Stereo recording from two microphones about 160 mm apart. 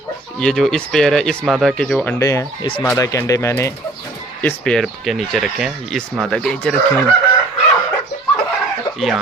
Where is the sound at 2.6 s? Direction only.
30° left (ahead or behind).